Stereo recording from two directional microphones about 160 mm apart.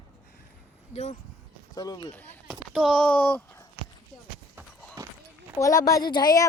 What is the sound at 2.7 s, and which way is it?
Speech, 5° left (ahead or behind).